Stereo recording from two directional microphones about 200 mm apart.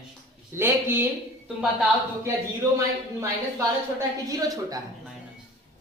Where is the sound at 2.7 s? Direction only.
15° right (ahead or behind).